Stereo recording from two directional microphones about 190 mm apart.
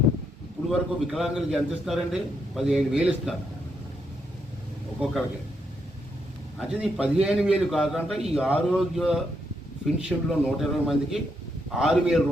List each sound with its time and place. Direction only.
0.7 s a man's voice: centre (ahead or behind)
6.6 s a man's voice: centre (ahead or behind)